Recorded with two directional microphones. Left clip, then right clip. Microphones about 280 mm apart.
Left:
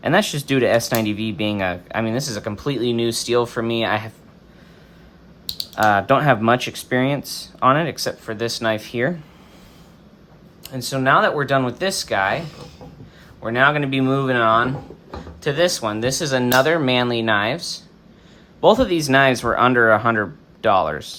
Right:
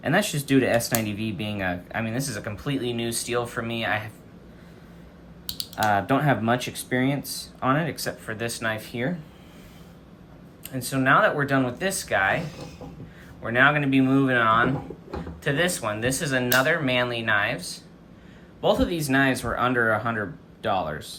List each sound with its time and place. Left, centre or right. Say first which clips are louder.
0.0 s speech: left 6 dB; centre
5.7 s speech: left 7 dB; centre
10.6 s speech: left 4 dB; centre
13.4 s speech: left 3 dB; centre